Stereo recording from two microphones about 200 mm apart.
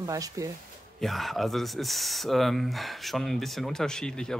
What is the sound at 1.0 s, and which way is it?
Speech, centre (ahead or behind).